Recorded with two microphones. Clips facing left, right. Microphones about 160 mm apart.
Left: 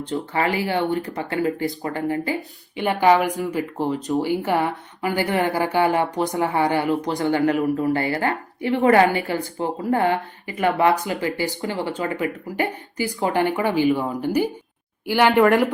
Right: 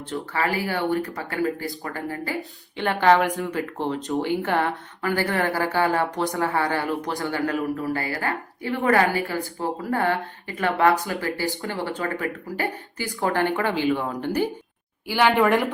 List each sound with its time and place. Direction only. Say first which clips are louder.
0.1 s a woman's voice: left 2 dB; 25° left (ahead or behind)